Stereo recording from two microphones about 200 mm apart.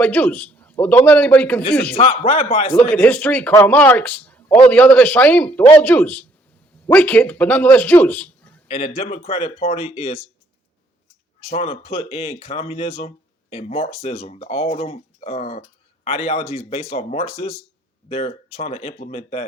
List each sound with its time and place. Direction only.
0.0 s speech: 10° left (ahead or behind)
2.0 s speech: 30° left (ahead or behind)
2.9 s speech: 10° left (ahead or behind)
8.6 s speech: 30° left (ahead or behind)
11.3 s speech: 30° left (ahead or behind)